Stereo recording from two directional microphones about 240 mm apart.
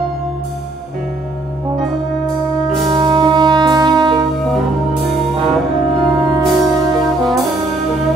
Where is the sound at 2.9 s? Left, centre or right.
Centre.